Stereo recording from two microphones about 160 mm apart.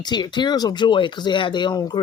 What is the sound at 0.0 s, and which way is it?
Speech, 25° left (ahead or behind).